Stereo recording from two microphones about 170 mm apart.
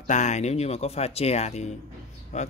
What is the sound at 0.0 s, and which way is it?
Speech, 45° left (ahead or behind).